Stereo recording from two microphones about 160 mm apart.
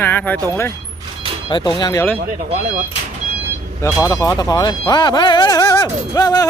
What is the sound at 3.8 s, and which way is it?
Speech, 20° left (ahead or behind).